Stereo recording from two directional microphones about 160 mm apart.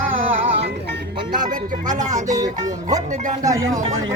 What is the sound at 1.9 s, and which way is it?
Music, 50° right (ahead or behind).